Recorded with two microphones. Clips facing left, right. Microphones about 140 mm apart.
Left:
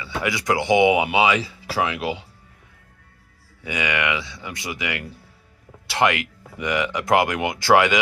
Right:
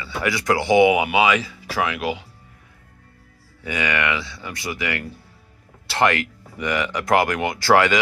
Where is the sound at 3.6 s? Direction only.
15° left (ahead or behind).